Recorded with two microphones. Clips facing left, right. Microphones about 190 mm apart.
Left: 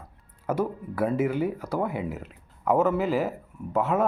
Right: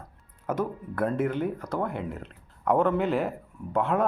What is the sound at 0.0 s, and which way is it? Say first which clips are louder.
Speech: left 2 dB; 10° left (ahead or behind).